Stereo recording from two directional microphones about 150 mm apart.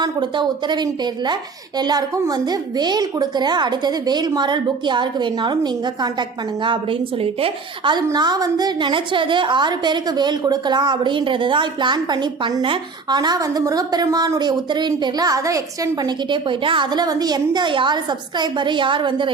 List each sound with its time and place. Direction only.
0.0 s a woman's voice: 30° right (ahead or behind)